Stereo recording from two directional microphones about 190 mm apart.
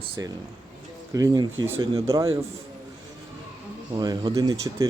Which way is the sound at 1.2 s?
20° right (ahead or behind).